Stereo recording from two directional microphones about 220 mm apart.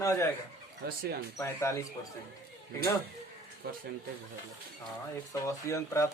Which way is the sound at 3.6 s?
45° right (ahead or behind).